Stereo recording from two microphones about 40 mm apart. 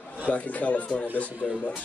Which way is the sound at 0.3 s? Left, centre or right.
Left.